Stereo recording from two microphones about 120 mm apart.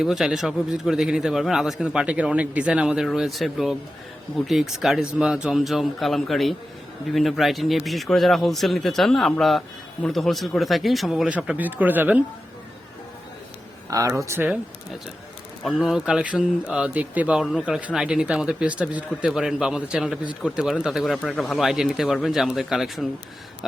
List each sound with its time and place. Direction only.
0.0 s a man's voice: 5° right (ahead or behind)
11.3 s speech: 10° right (ahead or behind)
14.3 s speech: 15° right (ahead or behind)
15.6 s a man's voice: 5° right (ahead or behind)
21.2 s a man's voice: 5° left (ahead or behind)